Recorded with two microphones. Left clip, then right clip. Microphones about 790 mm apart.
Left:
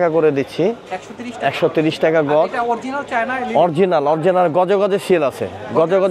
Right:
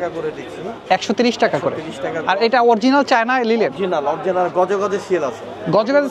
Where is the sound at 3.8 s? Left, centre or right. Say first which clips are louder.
Left 4 dB; left.